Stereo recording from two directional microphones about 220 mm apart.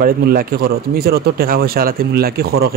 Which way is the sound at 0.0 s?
40° right (ahead or behind).